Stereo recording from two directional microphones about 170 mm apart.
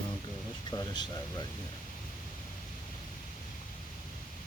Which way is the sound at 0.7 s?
25° left (ahead or behind).